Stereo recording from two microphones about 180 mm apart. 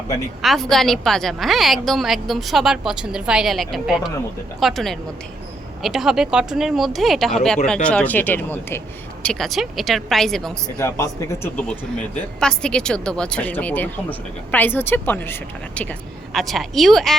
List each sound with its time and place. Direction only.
0.4 s a woman's voice: centre (ahead or behind)
10.8 s a woman's voice: 15° left (ahead or behind)
12.4 s a woman's voice: 5° left (ahead or behind)